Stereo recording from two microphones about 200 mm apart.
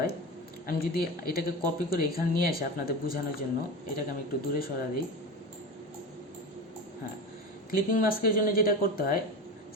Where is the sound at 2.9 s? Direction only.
45° left (ahead or behind).